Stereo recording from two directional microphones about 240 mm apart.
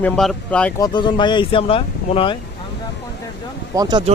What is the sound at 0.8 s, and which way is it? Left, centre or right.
Speech, centre.